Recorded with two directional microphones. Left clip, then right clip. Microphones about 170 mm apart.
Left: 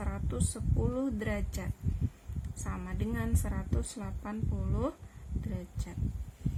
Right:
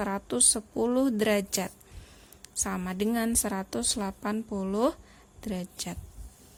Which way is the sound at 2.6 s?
60° right (ahead or behind).